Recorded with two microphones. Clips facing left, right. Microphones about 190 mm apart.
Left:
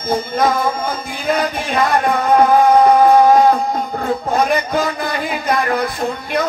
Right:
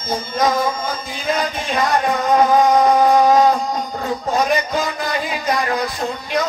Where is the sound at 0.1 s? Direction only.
55° left (ahead or behind).